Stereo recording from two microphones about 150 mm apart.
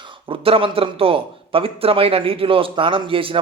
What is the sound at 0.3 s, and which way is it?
Speech, 40° right (ahead or behind).